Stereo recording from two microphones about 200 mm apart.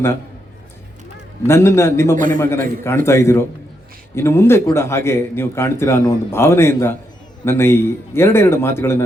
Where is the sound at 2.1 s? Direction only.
40° right (ahead or behind).